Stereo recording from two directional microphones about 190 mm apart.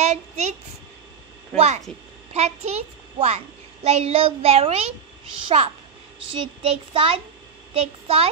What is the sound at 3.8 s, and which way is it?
Child singing, 35° right (ahead or behind).